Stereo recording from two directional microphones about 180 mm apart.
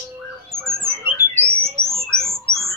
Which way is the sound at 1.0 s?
10° right (ahead or behind).